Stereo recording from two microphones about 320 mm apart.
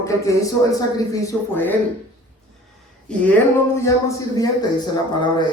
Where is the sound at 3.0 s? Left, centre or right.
Centre.